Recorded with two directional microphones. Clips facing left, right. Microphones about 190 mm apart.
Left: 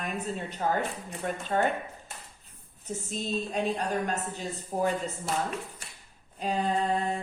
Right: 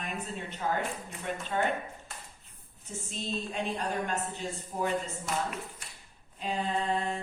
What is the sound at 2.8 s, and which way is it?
Speech, 40° left (ahead or behind).